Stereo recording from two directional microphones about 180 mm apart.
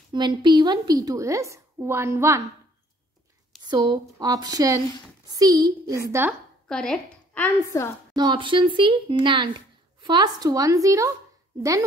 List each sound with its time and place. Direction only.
0.1 s a woman's voice: 25° right (ahead or behind)
3.6 s speech: 20° right (ahead or behind)
6.7 s a woman's voice: 5° left (ahead or behind)
8.2 s speech: 25° right (ahead or behind)